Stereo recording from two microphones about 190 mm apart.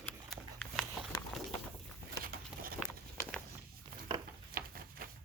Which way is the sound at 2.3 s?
50° right (ahead or behind).